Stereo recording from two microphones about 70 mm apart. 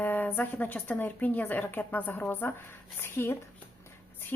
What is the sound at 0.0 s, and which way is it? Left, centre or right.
Speech, left.